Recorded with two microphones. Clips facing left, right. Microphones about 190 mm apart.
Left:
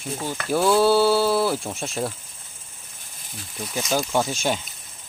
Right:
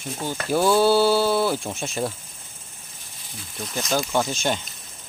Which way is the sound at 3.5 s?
5° left (ahead or behind).